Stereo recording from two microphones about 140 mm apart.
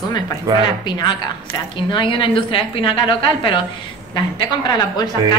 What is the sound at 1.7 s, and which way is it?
A woman's voice, 40° left (ahead or behind).